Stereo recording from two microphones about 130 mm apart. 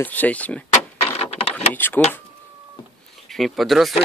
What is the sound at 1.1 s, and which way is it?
Printer, 50° left (ahead or behind).